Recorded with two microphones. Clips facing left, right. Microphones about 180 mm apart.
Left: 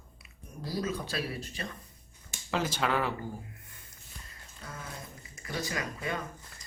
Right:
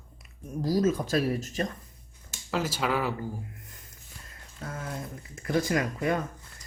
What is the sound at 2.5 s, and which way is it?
Speech, 5° right (ahead or behind).